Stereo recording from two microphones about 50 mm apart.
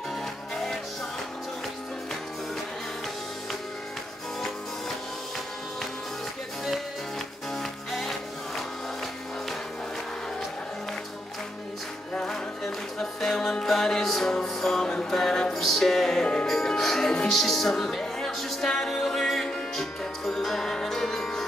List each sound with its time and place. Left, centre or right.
7.5 s music: centre
12.1 s music: centre